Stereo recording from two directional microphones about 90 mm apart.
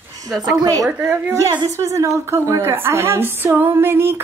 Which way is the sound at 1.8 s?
35° right (ahead or behind).